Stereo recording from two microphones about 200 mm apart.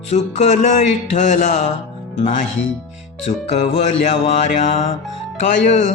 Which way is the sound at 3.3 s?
30° left (ahead or behind).